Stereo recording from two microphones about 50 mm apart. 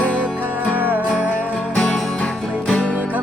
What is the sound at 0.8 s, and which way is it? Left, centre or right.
Music, right.